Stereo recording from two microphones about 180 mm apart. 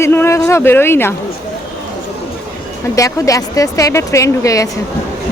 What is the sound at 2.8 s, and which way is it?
Speech, 20° left (ahead or behind).